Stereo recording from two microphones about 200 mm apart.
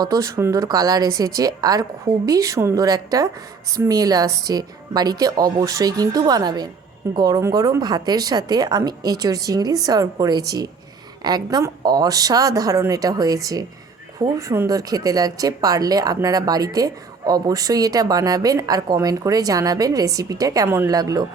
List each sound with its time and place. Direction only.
0.0 s a woman's voice: 15° right (ahead or behind)